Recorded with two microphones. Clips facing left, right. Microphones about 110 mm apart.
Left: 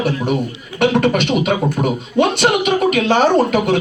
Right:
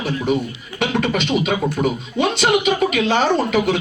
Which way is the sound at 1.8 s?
20° left (ahead or behind).